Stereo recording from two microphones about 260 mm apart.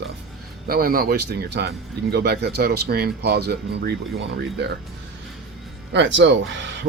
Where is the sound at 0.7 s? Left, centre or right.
Right.